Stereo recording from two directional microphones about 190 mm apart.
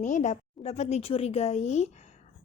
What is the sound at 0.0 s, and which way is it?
A woman's voice, 40° left (ahead or behind).